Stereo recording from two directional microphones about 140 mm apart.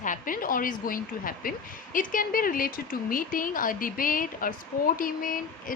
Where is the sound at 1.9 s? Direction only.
75° left (ahead or behind).